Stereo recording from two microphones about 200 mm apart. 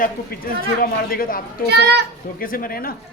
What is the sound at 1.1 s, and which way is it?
Speech, 45° left (ahead or behind).